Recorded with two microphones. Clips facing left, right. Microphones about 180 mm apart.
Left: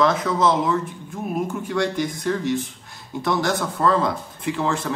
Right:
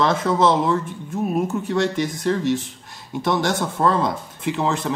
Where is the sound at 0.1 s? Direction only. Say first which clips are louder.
Right 2 dB; 25° right (ahead or behind).